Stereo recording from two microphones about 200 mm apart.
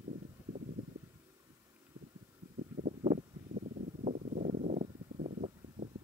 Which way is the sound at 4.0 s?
35° right (ahead or behind).